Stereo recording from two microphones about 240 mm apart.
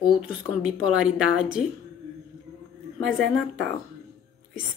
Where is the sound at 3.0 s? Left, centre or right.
Centre.